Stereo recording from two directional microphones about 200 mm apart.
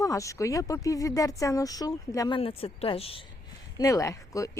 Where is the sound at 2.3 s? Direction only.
30° left (ahead or behind).